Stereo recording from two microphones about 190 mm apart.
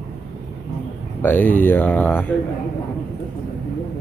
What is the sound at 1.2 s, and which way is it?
A man's voice, 10° left (ahead or behind).